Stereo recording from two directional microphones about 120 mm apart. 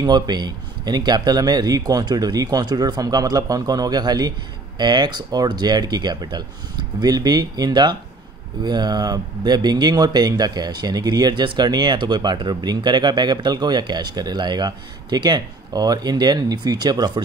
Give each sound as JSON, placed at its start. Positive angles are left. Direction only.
{"t": 0.0, "sound": "speech", "side_deg": -35}